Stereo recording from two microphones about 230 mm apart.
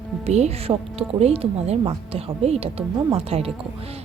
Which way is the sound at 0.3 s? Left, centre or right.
Right.